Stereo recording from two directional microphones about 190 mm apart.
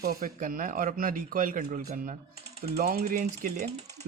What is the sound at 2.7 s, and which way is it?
Speech, 55° right (ahead or behind).